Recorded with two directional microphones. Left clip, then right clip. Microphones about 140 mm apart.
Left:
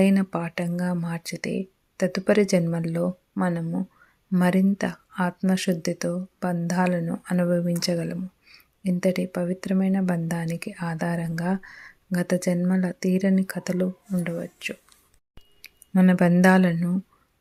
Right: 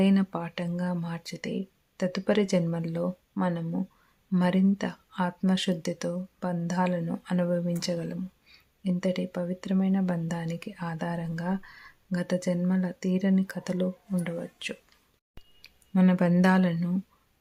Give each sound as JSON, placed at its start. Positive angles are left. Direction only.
{"t": 0.0, "sound": "speech", "side_deg": 20}
{"t": 15.6, "sound": "a sound", "side_deg": 20}
{"t": 16.4, "sound": "speech", "side_deg": 25}
{"t": 16.7, "sound": "speech", "side_deg": 15}